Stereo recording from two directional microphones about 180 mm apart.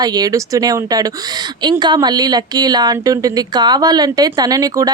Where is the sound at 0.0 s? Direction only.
20° right (ahead or behind).